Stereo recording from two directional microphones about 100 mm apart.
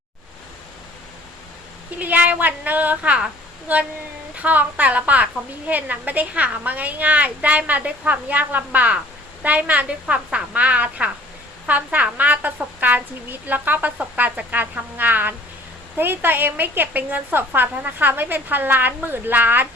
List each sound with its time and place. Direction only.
2.0 s a woman's voice: 15° right (ahead or behind)